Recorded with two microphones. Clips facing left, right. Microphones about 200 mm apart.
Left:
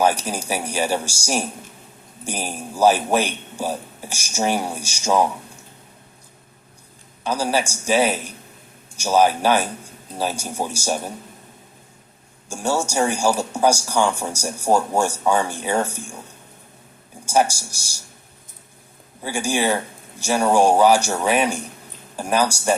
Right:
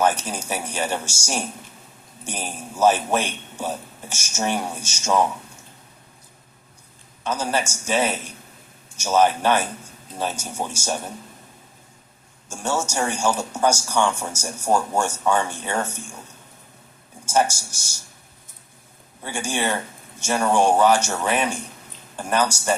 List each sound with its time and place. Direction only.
0.2 s a man's voice: 10° left (ahead or behind)
7.3 s a man's voice: 10° left (ahead or behind)
12.5 s a man's voice: 10° left (ahead or behind)
17.2 s a man's voice: 10° left (ahead or behind)
19.2 s a man's voice: 10° left (ahead or behind)